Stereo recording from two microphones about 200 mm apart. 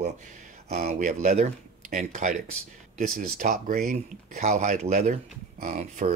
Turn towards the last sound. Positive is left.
turn(degrees=-35)  # may be behind; listen again after turning